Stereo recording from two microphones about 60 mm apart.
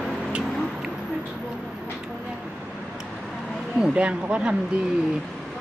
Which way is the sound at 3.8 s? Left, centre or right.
Centre.